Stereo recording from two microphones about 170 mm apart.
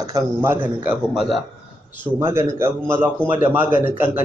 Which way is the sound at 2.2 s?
15° right (ahead or behind).